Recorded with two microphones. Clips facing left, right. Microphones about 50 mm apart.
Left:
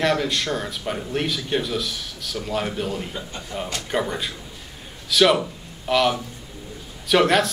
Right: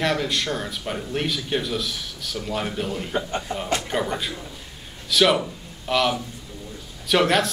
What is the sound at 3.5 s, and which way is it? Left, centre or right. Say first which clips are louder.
Speech: left 2 dB; right.